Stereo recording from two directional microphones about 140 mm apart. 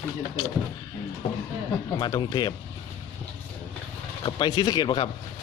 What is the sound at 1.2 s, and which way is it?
Speech, 50° left (ahead or behind).